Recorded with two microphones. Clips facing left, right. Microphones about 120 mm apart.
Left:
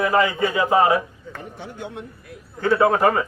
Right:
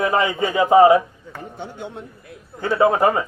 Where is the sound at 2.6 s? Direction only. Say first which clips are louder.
Right 1 dB; 20° right (ahead or behind).